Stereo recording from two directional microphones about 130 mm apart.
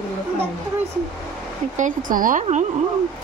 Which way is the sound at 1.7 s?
80° right.